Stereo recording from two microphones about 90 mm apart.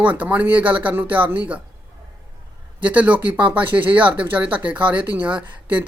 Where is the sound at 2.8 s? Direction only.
15° right (ahead or behind).